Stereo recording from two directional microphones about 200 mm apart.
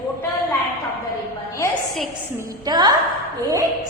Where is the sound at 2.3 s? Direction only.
20° right (ahead or behind).